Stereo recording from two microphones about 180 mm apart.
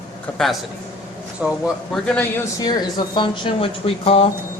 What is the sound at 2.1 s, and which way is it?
Speech, 10° left (ahead or behind).